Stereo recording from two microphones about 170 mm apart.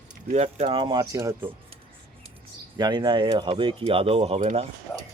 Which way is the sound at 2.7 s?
25° right (ahead or behind).